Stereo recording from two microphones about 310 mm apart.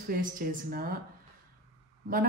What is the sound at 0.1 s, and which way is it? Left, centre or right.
Speech, right.